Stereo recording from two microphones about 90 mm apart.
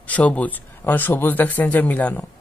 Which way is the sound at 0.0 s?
15° left (ahead or behind).